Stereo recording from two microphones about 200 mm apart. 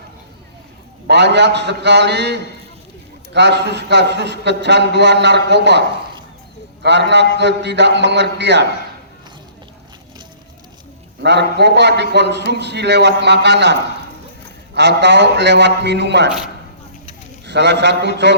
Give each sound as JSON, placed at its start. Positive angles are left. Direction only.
{"t": 1.0, "sound": "a man's voice", "side_deg": -60}
{"t": 6.8, "sound": "a man's voice", "side_deg": -60}
{"t": 11.2, "sound": "a man's voice", "side_deg": -60}
{"t": 14.8, "sound": "a man's voice", "side_deg": -60}
{"t": 17.4, "sound": "a man's voice", "side_deg": -60}